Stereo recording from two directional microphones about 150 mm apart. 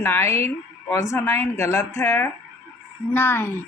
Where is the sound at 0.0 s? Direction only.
15° left (ahead or behind).